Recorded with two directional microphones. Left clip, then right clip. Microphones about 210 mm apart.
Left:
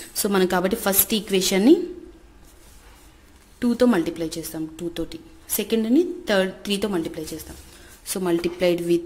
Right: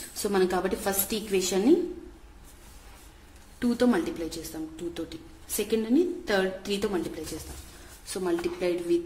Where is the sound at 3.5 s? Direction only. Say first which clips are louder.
Left 5 dB; 30° left (ahead or behind).